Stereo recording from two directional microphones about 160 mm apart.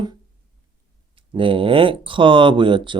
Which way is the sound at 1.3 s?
35° right (ahead or behind).